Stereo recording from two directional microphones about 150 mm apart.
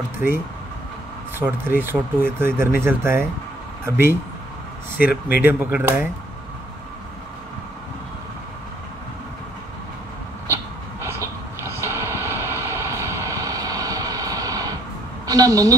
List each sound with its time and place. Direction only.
1.4 s speech: 15° right (ahead or behind)
5.0 s speech: 15° right (ahead or behind)
10.5 s a sound: 20° right (ahead or behind)
15.2 s a woman's voice: 20° right (ahead or behind)